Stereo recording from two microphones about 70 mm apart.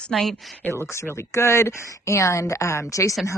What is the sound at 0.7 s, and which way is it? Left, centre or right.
Speech, left.